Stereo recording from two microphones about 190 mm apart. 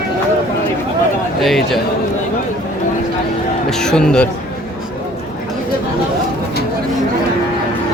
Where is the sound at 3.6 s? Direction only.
5° left (ahead or behind).